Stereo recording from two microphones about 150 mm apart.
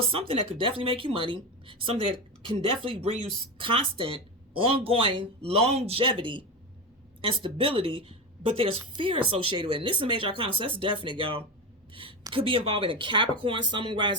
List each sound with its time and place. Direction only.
0.0 s a woman's voice: 40° right (ahead or behind)